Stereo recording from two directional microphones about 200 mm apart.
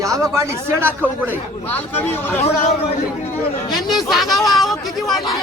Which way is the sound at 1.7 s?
10° left (ahead or behind).